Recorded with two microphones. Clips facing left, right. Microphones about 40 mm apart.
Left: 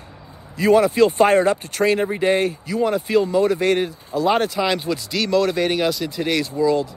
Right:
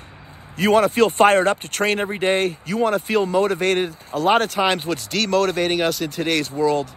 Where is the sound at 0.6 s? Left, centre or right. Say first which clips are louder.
Left 1 dB; right.